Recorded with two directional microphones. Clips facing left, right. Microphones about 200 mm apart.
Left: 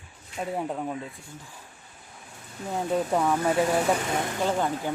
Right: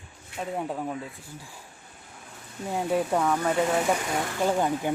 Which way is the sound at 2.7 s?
10° right (ahead or behind).